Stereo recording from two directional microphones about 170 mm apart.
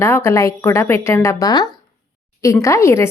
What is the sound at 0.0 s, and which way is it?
Speech, 15° left (ahead or behind).